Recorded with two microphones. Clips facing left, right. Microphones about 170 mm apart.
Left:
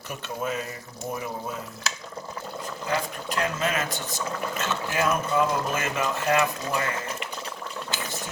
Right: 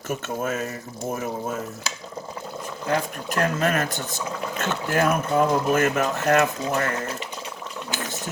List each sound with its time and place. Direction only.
0.1 s speech: 45° right (ahead or behind)
3.2 s speech: 50° right (ahead or behind)